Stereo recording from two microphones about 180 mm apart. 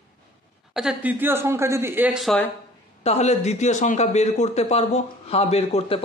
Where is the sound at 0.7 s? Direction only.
5° right (ahead or behind).